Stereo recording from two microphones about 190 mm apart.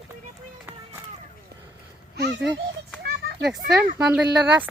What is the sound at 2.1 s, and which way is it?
Speech, 60° right (ahead or behind).